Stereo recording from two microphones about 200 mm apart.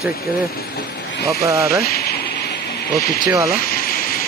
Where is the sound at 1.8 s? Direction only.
50° left (ahead or behind).